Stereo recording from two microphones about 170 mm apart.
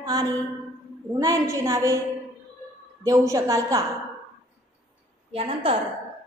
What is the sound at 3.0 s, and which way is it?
Speech, 20° right (ahead or behind).